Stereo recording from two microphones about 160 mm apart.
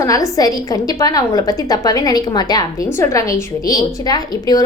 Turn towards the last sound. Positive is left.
turn(degrees=25)  # may be behind; listen again after turning